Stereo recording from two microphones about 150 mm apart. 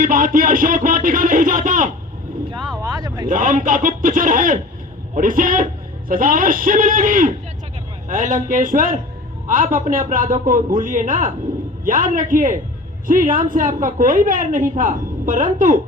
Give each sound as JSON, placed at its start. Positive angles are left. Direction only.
{"t": 0.0, "sound": "music", "side_deg": -65}
{"t": 2.8, "sound": "vehicle", "side_deg": -25}
{"t": 3.2, "sound": "a woman's voice", "side_deg": -60}